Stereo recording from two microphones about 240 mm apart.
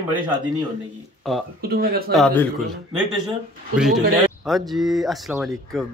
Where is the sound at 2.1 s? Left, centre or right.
Centre.